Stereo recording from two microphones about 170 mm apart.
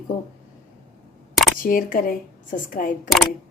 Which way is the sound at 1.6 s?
55° left (ahead or behind).